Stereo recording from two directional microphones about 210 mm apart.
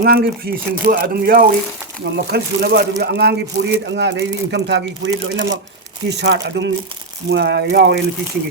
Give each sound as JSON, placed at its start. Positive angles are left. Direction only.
{"t": 0.0, "sound": "speech", "side_deg": -45}